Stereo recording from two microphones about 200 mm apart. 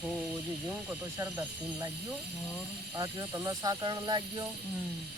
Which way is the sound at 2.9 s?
15° right (ahead or behind).